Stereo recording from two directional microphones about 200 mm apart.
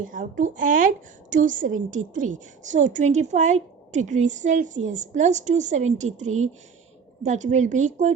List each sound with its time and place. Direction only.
0.0 s a woman's voice: 40° right (ahead or behind)